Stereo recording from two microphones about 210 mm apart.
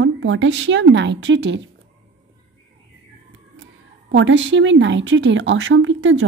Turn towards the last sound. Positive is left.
turn(degrees=-65)  # may be behind; listen again after turning